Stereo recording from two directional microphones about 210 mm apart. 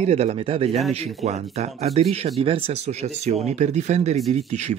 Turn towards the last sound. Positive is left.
turn(degrees=-30)  # may be behind; listen again after turning